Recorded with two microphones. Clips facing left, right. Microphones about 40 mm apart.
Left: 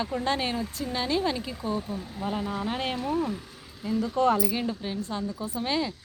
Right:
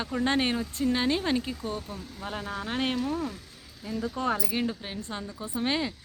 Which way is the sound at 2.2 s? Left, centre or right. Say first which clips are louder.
Left 4 dB; centre.